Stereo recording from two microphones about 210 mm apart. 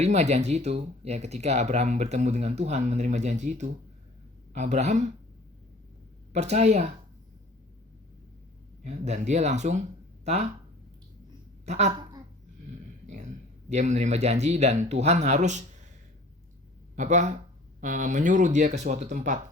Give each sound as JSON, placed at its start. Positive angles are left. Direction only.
{"t": 0.0, "sound": "speech", "side_deg": -30}
{"t": 6.3, "sound": "speech", "side_deg": -30}
{"t": 8.8, "sound": "speech", "side_deg": -35}
{"t": 11.6, "sound": "a woman's voice", "side_deg": -30}
{"t": 13.7, "sound": "speech", "side_deg": -35}
{"t": 16.9, "sound": "speech", "side_deg": -35}